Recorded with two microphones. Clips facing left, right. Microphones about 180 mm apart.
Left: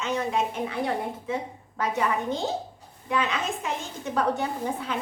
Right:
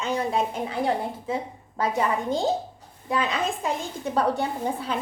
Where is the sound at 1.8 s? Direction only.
30° right (ahead or behind).